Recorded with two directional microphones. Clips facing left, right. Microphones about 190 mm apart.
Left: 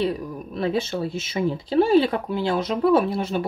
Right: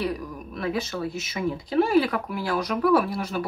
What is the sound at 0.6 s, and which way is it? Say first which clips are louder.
Speech: left 4 dB; 30° left (ahead or behind).